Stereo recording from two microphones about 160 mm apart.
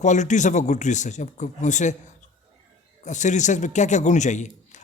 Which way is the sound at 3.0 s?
50° left (ahead or behind).